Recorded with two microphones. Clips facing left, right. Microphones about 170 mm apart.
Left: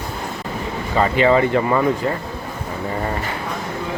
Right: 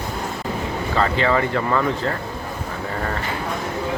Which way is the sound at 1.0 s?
15° left (ahead or behind).